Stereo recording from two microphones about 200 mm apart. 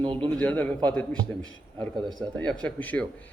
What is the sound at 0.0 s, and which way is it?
Speech, 25° right (ahead or behind).